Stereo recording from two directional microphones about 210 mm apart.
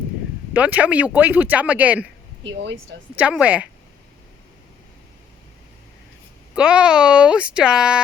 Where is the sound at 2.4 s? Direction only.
60° right (ahead or behind).